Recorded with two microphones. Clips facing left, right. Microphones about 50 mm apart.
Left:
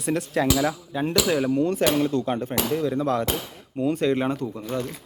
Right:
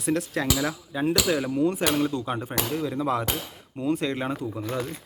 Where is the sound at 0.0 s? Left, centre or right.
Centre.